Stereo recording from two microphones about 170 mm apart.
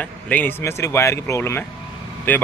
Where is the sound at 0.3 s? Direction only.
10° left (ahead or behind).